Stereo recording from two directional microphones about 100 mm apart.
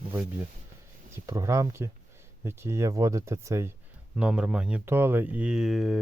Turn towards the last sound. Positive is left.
turn(degrees=-5)  # may be behind; listen again after turning